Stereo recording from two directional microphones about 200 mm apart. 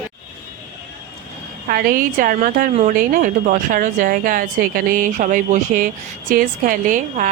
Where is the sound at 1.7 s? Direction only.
45° right (ahead or behind).